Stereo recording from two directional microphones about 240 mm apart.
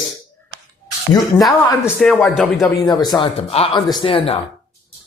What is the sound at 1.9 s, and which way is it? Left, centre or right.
Speech, centre.